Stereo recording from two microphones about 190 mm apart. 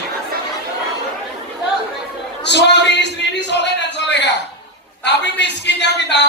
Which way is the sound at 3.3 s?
65° left (ahead or behind).